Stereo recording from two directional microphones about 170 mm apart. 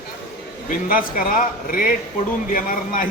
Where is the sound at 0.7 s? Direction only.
55° left (ahead or behind).